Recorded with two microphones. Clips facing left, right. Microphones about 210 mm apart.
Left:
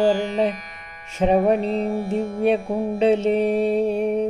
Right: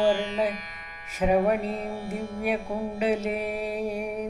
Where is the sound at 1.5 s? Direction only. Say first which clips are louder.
Left 7 dB; 30° left (ahead or behind).